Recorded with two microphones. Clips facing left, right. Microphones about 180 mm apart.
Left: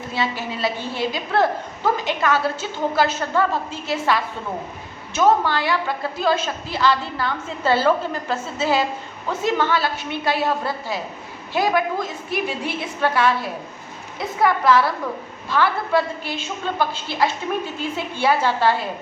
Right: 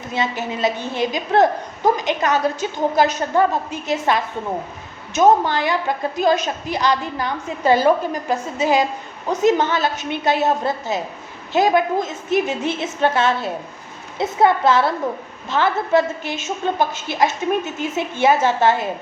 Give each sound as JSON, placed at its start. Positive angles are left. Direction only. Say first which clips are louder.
{"t": 0.1, "sound": "a woman's voice", "louder": "right 3 dB", "side_deg": -20}